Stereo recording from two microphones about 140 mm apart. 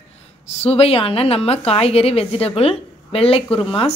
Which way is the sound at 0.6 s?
45° left (ahead or behind).